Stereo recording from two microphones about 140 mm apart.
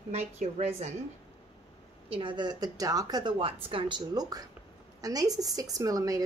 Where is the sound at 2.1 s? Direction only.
35° right (ahead or behind).